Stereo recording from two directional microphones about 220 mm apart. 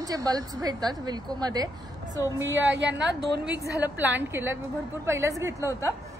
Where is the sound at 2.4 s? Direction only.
60° right (ahead or behind).